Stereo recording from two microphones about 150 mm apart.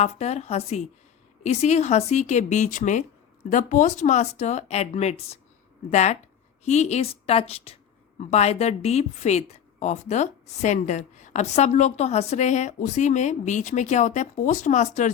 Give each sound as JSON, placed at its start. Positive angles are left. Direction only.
{"t": 0.0, "sound": "a woman's voice", "side_deg": 50}